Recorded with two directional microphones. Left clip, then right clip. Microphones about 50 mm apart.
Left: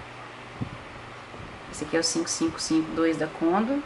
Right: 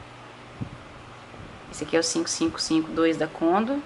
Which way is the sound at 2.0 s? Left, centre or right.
Right.